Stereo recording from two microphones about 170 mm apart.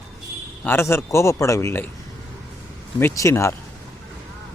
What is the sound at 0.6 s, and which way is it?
Speech, 15° left (ahead or behind).